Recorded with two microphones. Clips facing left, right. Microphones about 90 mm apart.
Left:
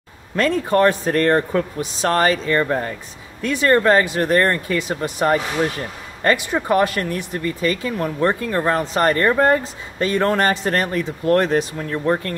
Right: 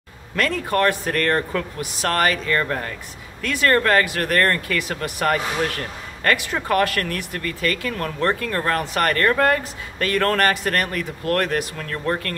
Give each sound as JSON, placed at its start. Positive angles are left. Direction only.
{"t": 0.4, "sound": "speech", "side_deg": 25}